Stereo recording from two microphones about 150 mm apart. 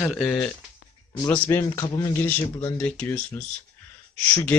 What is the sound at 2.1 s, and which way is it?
Speech, 10° left (ahead or behind).